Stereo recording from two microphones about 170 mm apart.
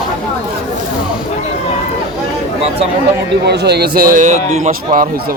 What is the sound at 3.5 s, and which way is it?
A man's voice, 75° right (ahead or behind).